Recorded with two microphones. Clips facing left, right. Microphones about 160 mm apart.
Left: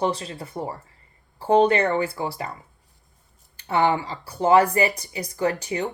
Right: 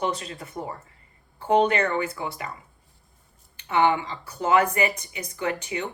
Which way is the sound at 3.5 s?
35° left (ahead or behind).